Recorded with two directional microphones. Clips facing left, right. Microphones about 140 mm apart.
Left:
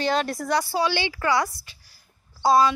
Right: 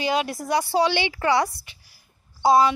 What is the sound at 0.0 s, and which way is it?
A woman's voice, 10° right (ahead or behind).